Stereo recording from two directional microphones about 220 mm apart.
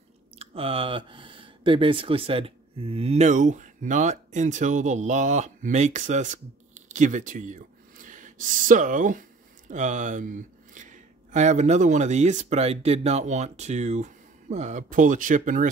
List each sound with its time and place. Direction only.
0.4 s speech: 25° right (ahead or behind)